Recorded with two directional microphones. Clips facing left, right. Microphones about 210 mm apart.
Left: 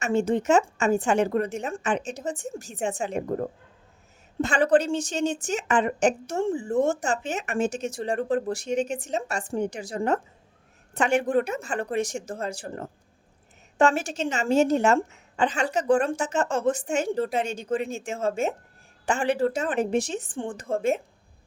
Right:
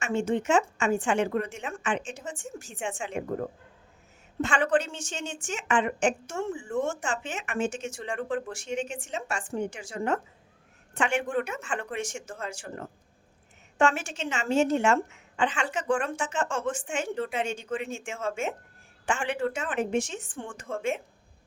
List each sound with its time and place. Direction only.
0.0 s a woman's voice: 40° left (ahead or behind)
4.4 s a woman's voice: 35° left (ahead or behind)